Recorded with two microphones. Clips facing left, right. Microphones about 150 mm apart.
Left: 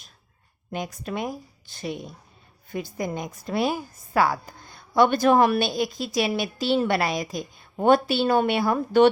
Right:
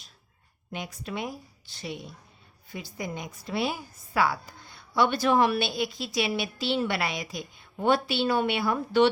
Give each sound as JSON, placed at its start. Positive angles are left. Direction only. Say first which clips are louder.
{"t": 0.7, "sound": "a woman's voice", "louder": "left 5 dB", "side_deg": 45}